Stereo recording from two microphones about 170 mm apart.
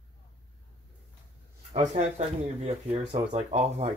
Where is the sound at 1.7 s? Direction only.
40° right (ahead or behind).